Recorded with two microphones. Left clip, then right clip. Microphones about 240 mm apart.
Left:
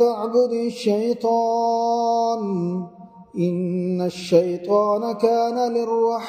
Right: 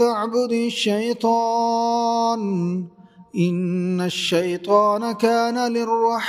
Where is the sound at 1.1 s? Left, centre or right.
Right.